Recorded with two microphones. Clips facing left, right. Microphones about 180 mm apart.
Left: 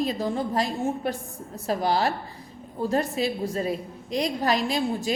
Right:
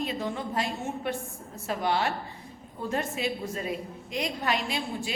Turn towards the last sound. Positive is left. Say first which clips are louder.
# left 7 dB
turn(degrees=40)  # may be behind; listen again after turning